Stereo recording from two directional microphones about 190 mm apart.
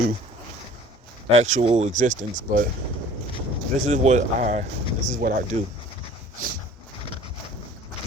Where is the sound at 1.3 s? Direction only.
35° right (ahead or behind).